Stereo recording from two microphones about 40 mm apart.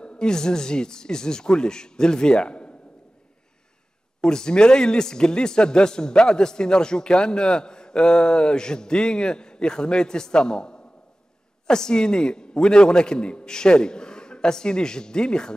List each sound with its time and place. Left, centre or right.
0.0 s speech: left
4.2 s a man's voice: centre